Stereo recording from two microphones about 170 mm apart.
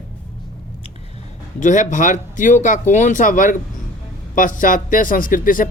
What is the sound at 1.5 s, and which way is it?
A man's voice, 45° left (ahead or behind).